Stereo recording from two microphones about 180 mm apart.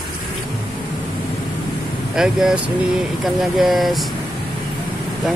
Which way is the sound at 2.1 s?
5° right (ahead or behind).